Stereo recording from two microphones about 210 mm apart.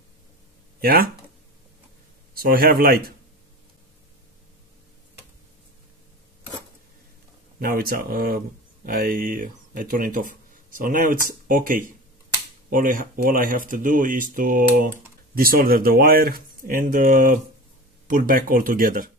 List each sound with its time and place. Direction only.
0.7 s speech: 45° right (ahead or behind)
2.3 s speech: 45° right (ahead or behind)
7.5 s speech: 45° right (ahead or behind)